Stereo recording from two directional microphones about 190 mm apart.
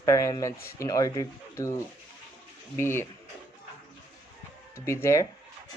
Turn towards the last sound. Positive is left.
turn(degrees=15)  # may be behind; listen again after turning